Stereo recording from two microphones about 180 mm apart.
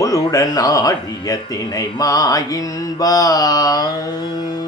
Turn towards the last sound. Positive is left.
turn(degrees=20)  # may be behind; listen again after turning